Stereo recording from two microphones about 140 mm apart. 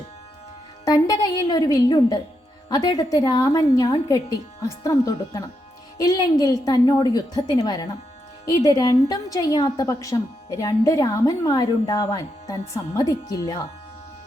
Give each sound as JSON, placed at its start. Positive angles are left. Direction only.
{"t": 0.9, "sound": "a woman's voice", "side_deg": 25}